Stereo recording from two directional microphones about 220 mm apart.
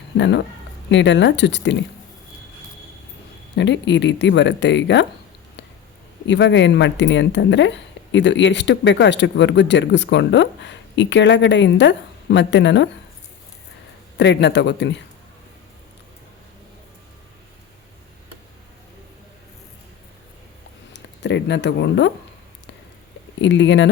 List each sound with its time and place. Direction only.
0.2 s speech: 50° left (ahead or behind)
3.5 s speech: 55° left (ahead or behind)
6.2 s speech: 55° left (ahead or behind)
14.2 s speech: 50° left (ahead or behind)
20.9 s speech: 50° left (ahead or behind)
23.4 s speech: 55° left (ahead or behind)